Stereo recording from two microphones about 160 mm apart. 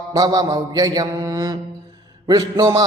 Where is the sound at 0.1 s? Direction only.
25° right (ahead or behind).